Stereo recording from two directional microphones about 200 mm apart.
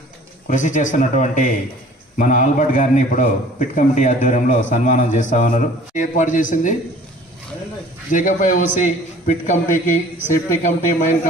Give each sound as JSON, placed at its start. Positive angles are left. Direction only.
{"t": 0.4, "sound": "a man's voice", "side_deg": 40}
{"t": 8.1, "sound": "a man's voice", "side_deg": 40}